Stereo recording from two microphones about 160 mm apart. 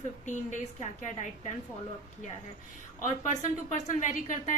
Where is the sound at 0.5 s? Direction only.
50° left (ahead or behind).